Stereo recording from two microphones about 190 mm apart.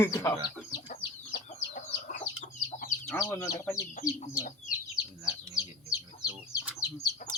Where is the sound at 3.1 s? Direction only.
15° left (ahead or behind).